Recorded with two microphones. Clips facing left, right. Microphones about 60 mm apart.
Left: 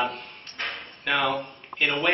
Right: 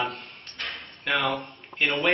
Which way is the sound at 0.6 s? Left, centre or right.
Left.